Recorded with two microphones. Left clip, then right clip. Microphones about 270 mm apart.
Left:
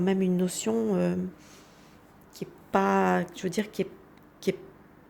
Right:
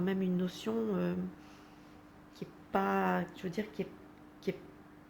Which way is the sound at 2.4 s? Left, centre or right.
Left.